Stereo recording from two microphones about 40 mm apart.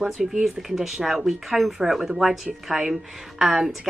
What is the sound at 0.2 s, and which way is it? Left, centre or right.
Speech, centre.